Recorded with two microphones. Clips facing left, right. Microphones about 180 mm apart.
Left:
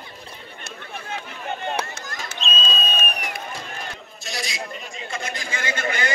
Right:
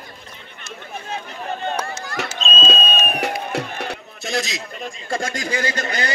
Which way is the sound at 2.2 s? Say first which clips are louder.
Right 11 dB; 70° right (ahead or behind).